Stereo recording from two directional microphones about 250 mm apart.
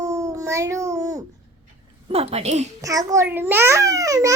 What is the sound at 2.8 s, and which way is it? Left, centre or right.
A child's voice, centre.